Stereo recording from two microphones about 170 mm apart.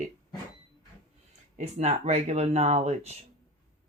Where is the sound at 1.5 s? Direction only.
40° right (ahead or behind).